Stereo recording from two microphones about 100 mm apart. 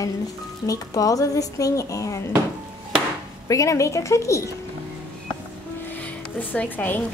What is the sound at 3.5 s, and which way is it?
A woman's voice, 30° left (ahead or behind).